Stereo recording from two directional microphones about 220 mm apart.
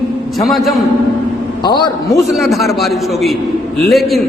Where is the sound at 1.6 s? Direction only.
20° left (ahead or behind).